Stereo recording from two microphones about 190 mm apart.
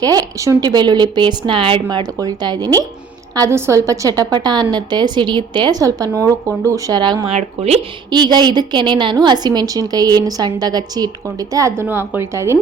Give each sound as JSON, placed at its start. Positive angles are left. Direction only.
{"t": 0.0, "sound": "a woman's voice", "side_deg": -20}
{"t": 7.3, "sound": "speech", "side_deg": -35}
{"t": 8.2, "sound": "a woman's voice", "side_deg": -25}